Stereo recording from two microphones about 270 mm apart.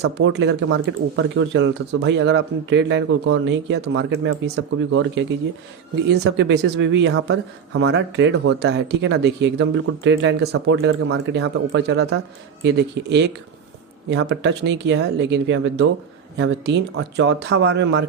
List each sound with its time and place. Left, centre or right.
0.0 s speech: right